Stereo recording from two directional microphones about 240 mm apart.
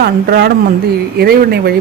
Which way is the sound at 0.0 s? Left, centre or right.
Right.